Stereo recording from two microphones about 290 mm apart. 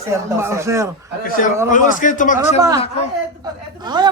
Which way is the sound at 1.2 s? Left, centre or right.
Left.